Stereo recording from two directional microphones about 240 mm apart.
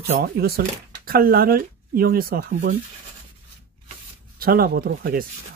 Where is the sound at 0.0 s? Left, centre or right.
Right.